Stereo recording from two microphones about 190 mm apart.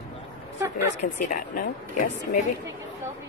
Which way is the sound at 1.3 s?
45° left (ahead or behind).